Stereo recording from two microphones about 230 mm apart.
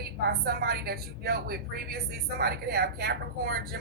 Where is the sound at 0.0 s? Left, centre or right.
Right.